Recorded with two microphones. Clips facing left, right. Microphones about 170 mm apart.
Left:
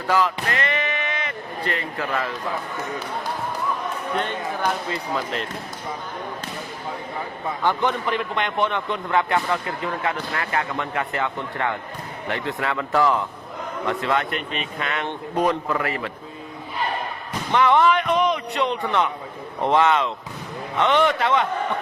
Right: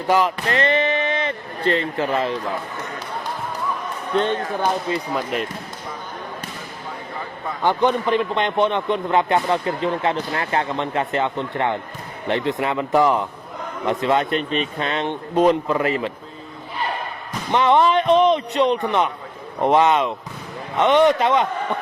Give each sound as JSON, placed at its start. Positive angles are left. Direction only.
{"t": 0.1, "sound": "speech", "side_deg": -20}
{"t": 0.5, "sound": "a sound", "side_deg": -30}
{"t": 4.6, "sound": "speech", "side_deg": -20}
{"t": 7.6, "sound": "a man's voice", "side_deg": -20}
{"t": 17.5, "sound": "a man's voice", "side_deg": -20}